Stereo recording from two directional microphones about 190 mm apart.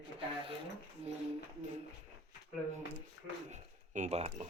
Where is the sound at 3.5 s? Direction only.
40° right (ahead or behind).